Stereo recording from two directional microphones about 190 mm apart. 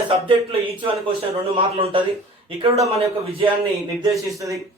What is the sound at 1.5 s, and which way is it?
A man's voice, 30° right (ahead or behind).